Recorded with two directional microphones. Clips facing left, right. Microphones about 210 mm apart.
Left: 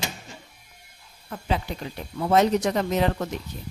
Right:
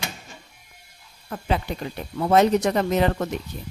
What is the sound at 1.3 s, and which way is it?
Speech, 55° right (ahead or behind).